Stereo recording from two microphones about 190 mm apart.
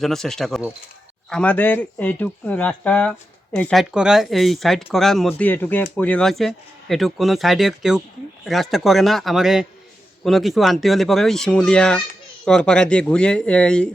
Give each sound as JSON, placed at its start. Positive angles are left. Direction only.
{"t": 0.0, "sound": "speech", "side_deg": 0}